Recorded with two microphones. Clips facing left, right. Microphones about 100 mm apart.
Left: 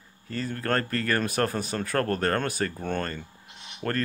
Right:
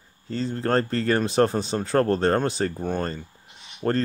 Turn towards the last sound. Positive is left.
turn(degrees=-25)  # may be behind; listen again after turning